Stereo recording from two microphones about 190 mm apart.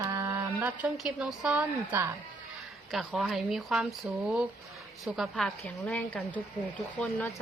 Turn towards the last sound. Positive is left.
turn(degrees=10)  # may be behind; listen again after turning